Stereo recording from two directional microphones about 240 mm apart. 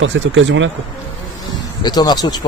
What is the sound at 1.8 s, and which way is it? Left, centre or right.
Speech, centre.